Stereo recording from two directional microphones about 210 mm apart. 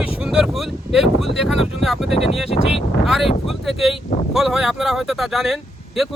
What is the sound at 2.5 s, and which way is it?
Speech, 30° left (ahead or behind).